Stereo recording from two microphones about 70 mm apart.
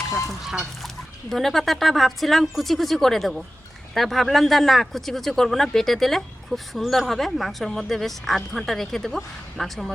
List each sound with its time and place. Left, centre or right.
1.3 s speech: centre